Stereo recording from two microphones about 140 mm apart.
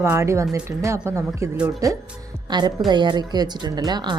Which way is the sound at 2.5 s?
30° right (ahead or behind).